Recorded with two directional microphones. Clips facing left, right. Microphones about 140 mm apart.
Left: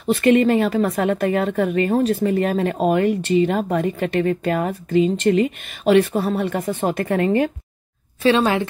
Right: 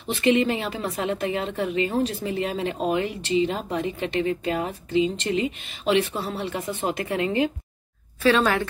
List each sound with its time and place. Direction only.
0.0 s speech: 55° left (ahead or behind)
8.2 s a woman's voice: 20° left (ahead or behind)